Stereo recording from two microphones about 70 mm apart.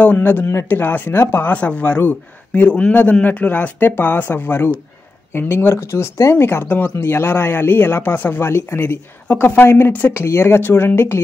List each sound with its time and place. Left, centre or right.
0.0 s a man's voice: left